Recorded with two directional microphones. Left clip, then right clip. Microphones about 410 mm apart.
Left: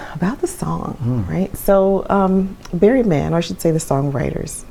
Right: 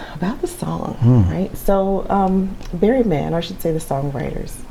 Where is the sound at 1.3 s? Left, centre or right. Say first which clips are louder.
Left 9 dB; left.